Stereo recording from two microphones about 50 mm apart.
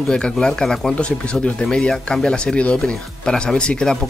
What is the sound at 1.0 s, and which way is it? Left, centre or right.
Speech, left.